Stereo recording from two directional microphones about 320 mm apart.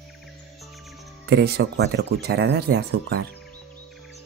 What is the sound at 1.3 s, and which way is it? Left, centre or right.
Speech, right.